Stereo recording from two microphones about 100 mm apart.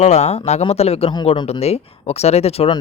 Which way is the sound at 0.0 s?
90° left.